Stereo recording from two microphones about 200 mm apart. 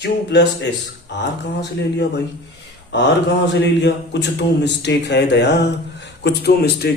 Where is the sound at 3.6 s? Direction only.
60° left (ahead or behind).